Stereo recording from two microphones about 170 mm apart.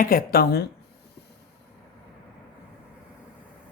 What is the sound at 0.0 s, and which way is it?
Speech, 55° left (ahead or behind).